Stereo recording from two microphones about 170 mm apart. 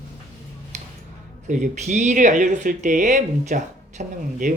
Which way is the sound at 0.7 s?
40° right (ahead or behind).